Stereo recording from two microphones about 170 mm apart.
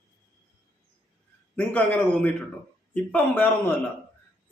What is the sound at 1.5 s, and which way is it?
A man's voice, 10° left (ahead or behind).